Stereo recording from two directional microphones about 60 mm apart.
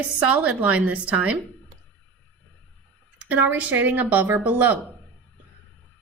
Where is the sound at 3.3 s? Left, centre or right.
Right.